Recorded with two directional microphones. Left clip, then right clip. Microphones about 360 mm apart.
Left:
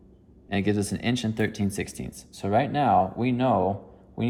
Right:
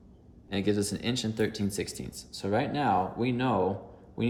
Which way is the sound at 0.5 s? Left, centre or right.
Centre.